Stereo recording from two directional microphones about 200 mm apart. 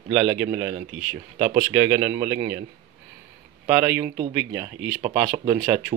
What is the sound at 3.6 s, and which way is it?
Speech, 10° right (ahead or behind).